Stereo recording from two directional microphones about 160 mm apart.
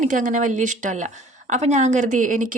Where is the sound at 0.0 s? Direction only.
50° right (ahead or behind).